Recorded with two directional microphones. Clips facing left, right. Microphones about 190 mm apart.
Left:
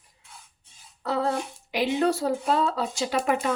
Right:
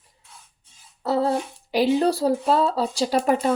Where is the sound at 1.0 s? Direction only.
35° right (ahead or behind).